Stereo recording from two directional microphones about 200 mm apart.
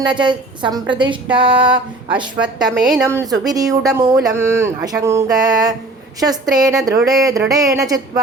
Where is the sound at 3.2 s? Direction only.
20° right (ahead or behind).